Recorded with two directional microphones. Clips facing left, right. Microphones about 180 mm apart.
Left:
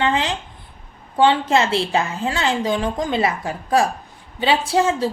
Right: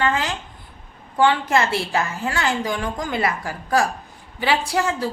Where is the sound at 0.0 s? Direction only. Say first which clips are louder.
Left 2 dB; 20° left (ahead or behind).